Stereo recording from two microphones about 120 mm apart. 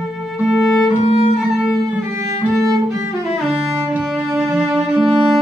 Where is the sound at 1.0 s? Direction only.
60° left (ahead or behind).